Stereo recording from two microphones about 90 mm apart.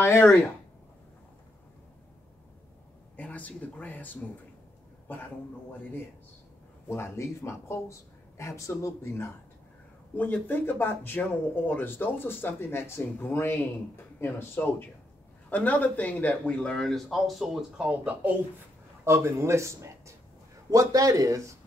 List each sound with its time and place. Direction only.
0.0 s speech: 30° left (ahead or behind)
3.2 s speech: 15° left (ahead or behind)
6.9 s speech: 25° left (ahead or behind); by 18.3 s 15° right (ahead or behind)
19.0 s a man's voice: 30° right (ahead or behind)